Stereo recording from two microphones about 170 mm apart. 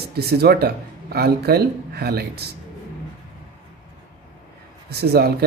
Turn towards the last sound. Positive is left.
turn(degrees=-65)  # may be behind; listen again after turning